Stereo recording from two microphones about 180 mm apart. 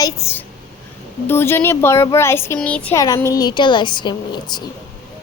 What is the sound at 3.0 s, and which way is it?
A woman's voice, 20° left (ahead or behind).